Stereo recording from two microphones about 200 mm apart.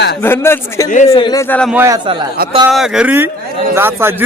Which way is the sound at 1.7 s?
15° right (ahead or behind).